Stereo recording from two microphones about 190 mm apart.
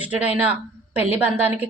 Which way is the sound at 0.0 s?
10° right (ahead or behind).